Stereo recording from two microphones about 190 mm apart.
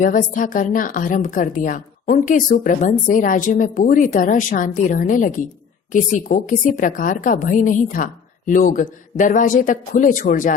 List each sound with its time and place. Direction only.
0.0 s a woman's voice: 45° left (ahead or behind)